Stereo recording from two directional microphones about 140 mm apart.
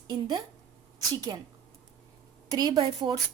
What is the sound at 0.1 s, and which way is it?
A woman's voice, 30° right (ahead or behind).